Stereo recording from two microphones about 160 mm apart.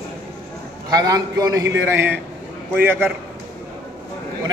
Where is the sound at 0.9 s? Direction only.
25° right (ahead or behind).